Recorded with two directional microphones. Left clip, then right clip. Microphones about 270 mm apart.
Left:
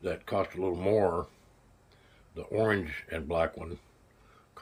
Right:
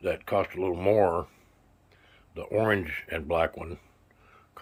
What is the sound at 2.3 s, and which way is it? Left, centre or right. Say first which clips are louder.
Speech: right 3 dB; centre.